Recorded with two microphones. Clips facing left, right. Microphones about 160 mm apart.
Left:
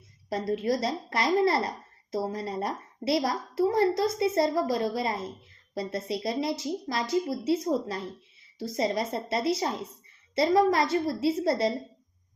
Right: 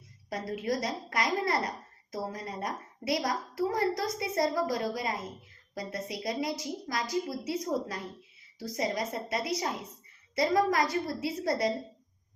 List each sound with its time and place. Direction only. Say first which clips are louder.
0.3 s a woman's voice: left 5 dB; 30° left (ahead or behind)